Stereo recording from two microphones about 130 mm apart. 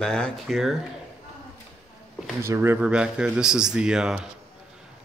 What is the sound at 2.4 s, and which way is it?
Speech, 20° right (ahead or behind).